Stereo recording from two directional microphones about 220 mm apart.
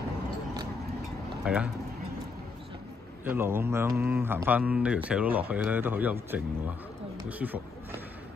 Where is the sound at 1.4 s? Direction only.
5° right (ahead or behind).